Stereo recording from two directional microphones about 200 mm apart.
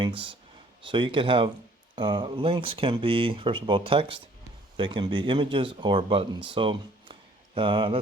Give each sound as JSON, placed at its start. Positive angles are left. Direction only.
{"t": 0.0, "sound": "speech", "side_deg": -25}